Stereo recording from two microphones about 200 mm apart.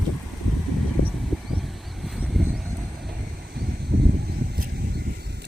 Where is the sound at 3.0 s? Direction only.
55° right (ahead or behind).